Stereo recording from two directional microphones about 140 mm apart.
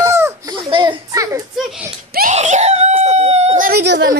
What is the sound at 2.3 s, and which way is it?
Screaming, 55° right (ahead or behind).